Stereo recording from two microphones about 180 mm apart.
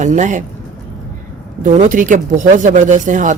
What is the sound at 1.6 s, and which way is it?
Speech, 45° right (ahead or behind).